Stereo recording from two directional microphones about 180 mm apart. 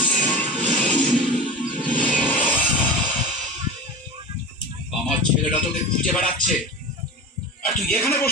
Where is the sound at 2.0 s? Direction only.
10° left (ahead or behind).